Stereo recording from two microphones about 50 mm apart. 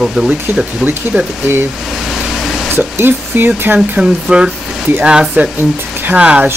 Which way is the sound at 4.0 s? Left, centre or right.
Centre.